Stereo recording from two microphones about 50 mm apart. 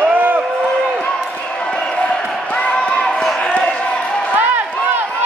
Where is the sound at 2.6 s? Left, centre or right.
Left.